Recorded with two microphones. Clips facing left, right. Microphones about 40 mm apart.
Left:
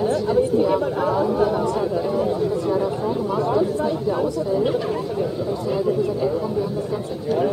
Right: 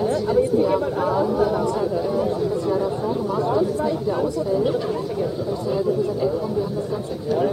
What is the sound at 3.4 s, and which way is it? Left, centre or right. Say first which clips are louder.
Speech: even; centre.